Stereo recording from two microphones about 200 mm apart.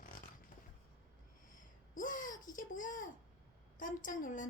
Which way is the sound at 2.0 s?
40° left (ahead or behind).